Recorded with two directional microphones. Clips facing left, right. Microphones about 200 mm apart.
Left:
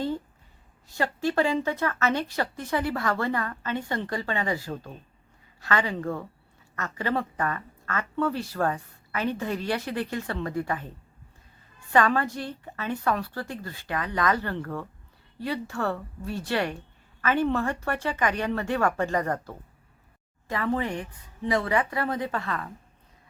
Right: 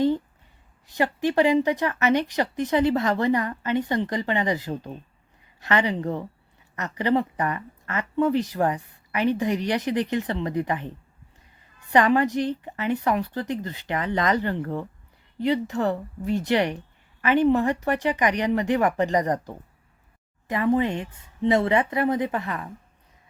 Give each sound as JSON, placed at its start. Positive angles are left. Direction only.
{"t": 0.9, "sound": "a woman's voice", "side_deg": -15}
{"t": 11.9, "sound": "a woman's voice", "side_deg": -20}